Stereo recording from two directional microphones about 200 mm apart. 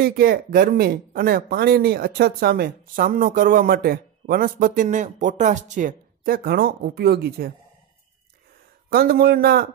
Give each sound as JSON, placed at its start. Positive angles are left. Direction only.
{"t": 0.0, "sound": "speech", "side_deg": -50}
{"t": 8.9, "sound": "speech", "side_deg": -50}